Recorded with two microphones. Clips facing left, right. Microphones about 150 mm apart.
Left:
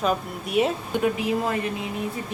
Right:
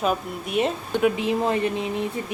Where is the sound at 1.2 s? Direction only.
25° right (ahead or behind).